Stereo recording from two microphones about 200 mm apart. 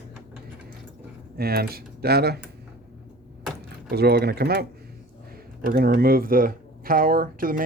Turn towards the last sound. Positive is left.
turn(degrees=-45)  # may be behind; listen again after turning